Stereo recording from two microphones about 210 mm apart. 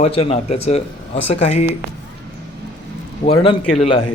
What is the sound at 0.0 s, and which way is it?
Speech, 30° left (ahead or behind).